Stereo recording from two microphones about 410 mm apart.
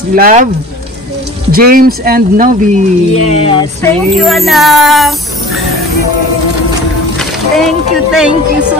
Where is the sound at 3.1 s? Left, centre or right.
Centre.